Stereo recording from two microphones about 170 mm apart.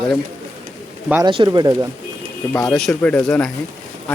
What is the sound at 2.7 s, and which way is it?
Speech, 5° left (ahead or behind).